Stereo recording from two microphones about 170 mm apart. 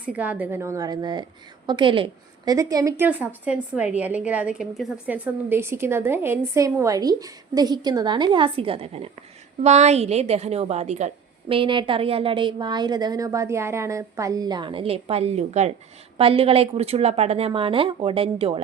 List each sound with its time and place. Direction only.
0.1 s a woman's voice: 10° right (ahead or behind); by 18.6 s 35° right (ahead or behind)